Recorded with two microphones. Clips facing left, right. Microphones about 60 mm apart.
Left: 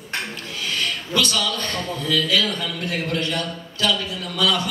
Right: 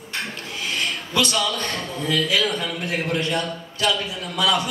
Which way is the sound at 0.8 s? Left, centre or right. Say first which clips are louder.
Even; right.